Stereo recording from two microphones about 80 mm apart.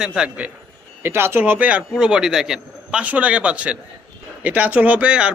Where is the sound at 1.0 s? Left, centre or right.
Right; by 5.3 s centre.